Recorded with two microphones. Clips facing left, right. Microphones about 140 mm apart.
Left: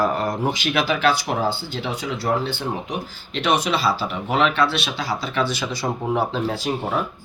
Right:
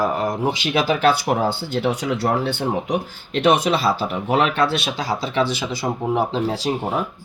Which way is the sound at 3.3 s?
50° right (ahead or behind).